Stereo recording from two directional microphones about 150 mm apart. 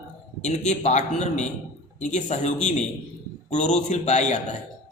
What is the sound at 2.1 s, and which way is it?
A man's voice, 50° left (ahead or behind).